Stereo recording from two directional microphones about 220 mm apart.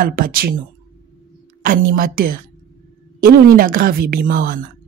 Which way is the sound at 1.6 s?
40° right (ahead or behind).